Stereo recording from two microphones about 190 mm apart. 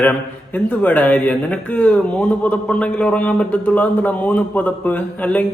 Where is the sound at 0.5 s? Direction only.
10° left (ahead or behind).